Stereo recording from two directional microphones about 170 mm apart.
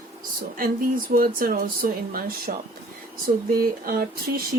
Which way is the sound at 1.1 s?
60° right (ahead or behind).